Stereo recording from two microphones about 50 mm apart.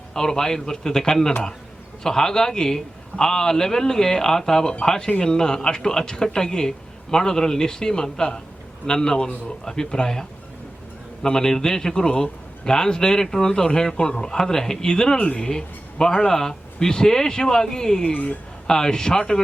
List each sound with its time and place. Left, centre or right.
0.1 s speech: centre
18.1 s a woman's voice: left
18.7 s speech: centre